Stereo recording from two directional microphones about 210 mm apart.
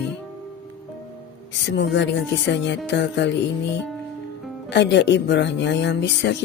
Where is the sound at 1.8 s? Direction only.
60° left (ahead or behind).